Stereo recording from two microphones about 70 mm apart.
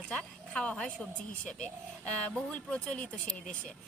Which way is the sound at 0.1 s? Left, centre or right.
Centre.